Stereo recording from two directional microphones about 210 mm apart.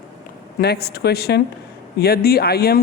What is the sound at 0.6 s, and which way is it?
Speech, 50° left (ahead or behind).